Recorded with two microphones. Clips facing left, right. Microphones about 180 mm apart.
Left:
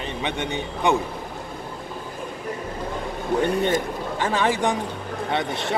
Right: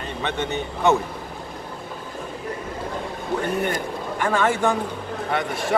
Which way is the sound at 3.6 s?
20° left (ahead or behind).